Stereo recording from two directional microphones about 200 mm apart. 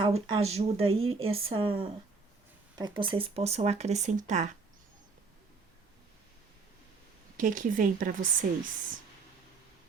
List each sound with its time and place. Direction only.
0.0 s speech: 30° right (ahead or behind)
7.3 s speech: 40° right (ahead or behind)